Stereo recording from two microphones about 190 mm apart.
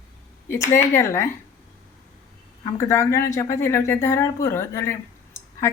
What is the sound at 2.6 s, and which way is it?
Speech, 15° left (ahead or behind).